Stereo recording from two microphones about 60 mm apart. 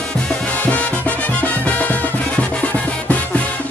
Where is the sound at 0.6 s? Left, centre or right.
Left.